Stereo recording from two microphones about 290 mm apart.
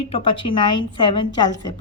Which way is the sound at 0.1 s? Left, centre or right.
Centre.